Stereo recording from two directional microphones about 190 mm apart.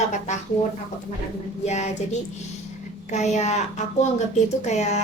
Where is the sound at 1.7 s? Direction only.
35° left (ahead or behind).